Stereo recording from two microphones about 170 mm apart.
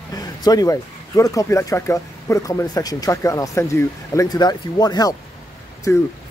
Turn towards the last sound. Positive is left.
turn(degrees=15)  # may be behind; listen again after turning